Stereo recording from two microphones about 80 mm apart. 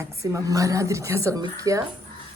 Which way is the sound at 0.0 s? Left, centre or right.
Right.